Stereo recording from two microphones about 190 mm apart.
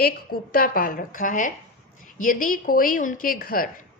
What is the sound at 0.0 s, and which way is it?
A woman's voice, 50° left (ahead or behind).